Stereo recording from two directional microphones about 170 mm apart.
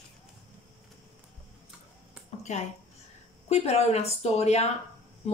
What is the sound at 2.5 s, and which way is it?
A woman's voice, 45° left (ahead or behind).